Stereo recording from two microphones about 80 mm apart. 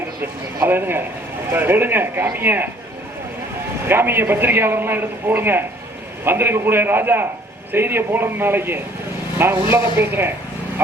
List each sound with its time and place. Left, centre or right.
0.2 s a man's voice: right
3.8 s a man's voice: right